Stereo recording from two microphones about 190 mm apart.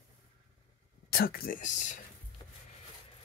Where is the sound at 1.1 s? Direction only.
50° left (ahead or behind).